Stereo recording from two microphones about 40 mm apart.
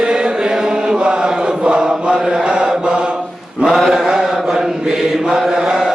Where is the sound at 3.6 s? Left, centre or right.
Centre.